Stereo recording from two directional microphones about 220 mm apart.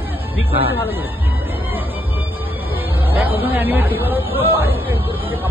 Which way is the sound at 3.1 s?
10° right (ahead or behind).